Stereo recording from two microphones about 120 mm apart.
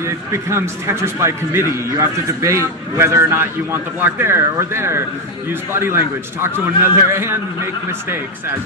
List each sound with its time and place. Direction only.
0.0 s a man's voice: 20° right (ahead or behind)